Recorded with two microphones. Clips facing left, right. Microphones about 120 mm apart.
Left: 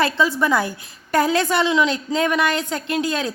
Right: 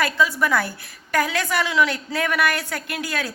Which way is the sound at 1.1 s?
30° left (ahead or behind).